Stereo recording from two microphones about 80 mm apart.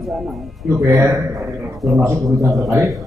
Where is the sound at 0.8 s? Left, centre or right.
Right.